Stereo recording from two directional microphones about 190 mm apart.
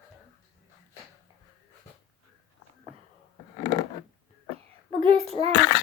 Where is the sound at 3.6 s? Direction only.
20° left (ahead or behind).